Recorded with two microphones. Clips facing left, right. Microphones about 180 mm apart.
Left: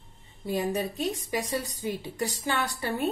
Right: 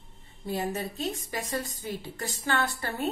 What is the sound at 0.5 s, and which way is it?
A woman's voice, 15° left (ahead or behind).